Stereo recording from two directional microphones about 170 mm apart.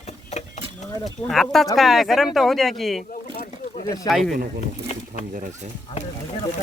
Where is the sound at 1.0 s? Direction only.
Centre (ahead or behind).